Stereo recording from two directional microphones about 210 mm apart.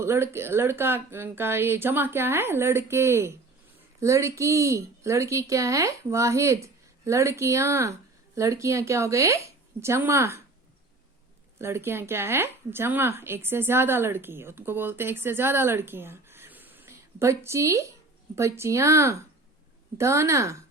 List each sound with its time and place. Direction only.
0.0 s a woman's voice: 10° right (ahead or behind)
11.6 s a woman's voice: 10° right (ahead or behind)